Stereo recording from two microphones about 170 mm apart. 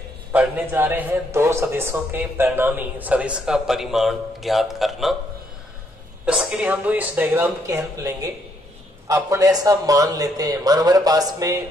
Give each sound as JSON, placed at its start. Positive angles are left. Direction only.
{"t": 0.3, "sound": "a man's voice", "side_deg": -10}
{"t": 6.2, "sound": "a man's voice", "side_deg": -5}